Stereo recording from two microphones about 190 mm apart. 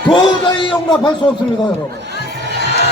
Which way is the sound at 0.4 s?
25° left (ahead or behind).